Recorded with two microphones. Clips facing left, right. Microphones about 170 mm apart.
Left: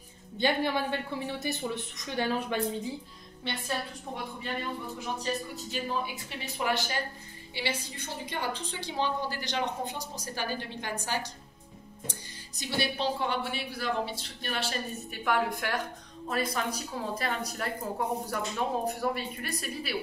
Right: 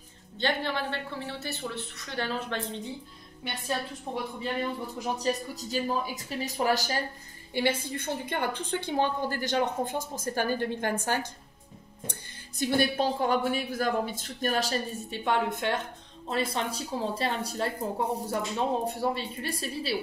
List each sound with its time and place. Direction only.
0.4 s a woman's voice: 10° left (ahead or behind)
4.1 s speech: 20° right (ahead or behind)
5.2 s speech: 40° right (ahead or behind)
7.5 s a woman's voice: 50° right (ahead or behind)
15.0 s speech: 25° right (ahead or behind)